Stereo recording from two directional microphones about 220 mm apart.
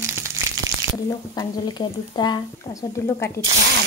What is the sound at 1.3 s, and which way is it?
Speech, 20° left (ahead or behind).